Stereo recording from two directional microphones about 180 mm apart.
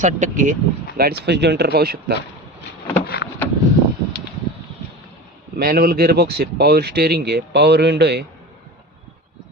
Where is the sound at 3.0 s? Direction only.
60° left (ahead or behind).